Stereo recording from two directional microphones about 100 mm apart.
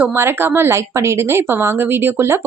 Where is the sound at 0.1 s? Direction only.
20° right (ahead or behind).